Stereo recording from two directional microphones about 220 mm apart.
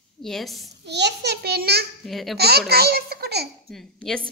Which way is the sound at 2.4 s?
45° right (ahead or behind).